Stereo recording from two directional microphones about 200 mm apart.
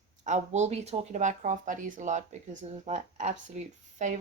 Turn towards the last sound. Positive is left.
turn(degrees=-40)  # may be behind; listen again after turning